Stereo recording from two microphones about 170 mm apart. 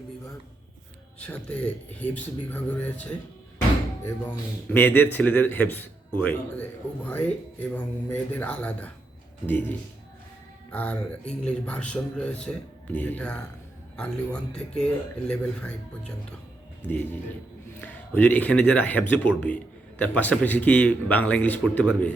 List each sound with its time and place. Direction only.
1.2 s speech: 5° left (ahead or behind)